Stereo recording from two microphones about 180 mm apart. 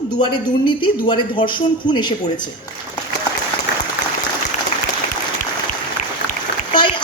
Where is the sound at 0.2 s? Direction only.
25° left (ahead or behind).